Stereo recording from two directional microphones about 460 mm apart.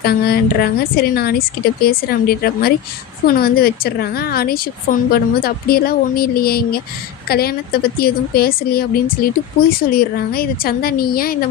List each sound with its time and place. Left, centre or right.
0.0 s a woman's voice: left